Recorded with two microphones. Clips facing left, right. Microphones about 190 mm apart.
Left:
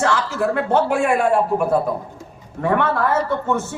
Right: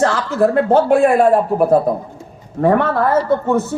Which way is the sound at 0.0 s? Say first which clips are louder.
Right 5 dB; 35° right (ahead or behind).